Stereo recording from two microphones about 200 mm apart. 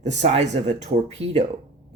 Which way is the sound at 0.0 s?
35° right (ahead or behind).